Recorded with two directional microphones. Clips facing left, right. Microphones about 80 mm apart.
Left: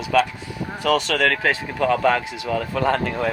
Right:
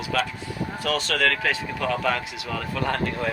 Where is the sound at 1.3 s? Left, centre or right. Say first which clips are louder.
Left 3 dB; left.